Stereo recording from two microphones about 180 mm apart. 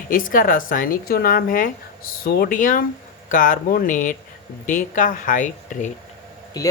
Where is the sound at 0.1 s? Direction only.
50° left (ahead or behind).